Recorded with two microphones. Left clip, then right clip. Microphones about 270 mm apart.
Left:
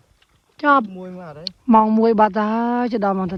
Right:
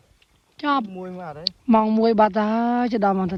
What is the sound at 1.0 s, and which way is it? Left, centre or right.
Speech, right.